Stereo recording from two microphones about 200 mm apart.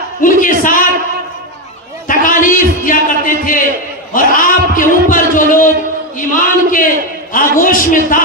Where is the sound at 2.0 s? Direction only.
40° left (ahead or behind).